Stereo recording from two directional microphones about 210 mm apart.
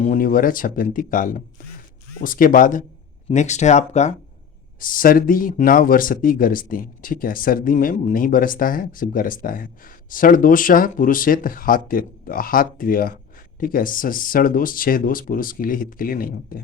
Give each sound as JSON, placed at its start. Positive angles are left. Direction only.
{"t": 0.0, "sound": "speech", "side_deg": 40}